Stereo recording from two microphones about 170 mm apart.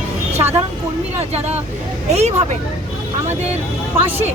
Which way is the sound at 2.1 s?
40° right (ahead or behind).